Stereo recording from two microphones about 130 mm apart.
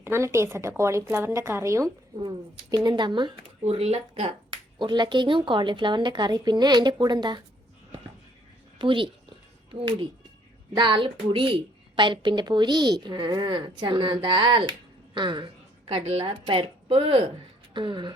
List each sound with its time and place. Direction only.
0.0 s speech: 20° right (ahead or behind); by 3.4 s 35° right (ahead or behind)
3.6 s speech: 50° right (ahead or behind)
4.8 s speech: 35° right (ahead or behind)
8.8 s a woman's voice: 40° right (ahead or behind)
10.8 s a woman's voice: 35° right (ahead or behind)
15.9 s speech: 45° right (ahead or behind)